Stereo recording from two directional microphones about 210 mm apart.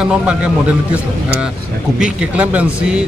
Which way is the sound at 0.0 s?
5° right (ahead or behind).